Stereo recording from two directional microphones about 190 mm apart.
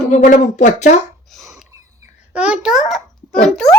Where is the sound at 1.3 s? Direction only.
Centre (ahead or behind).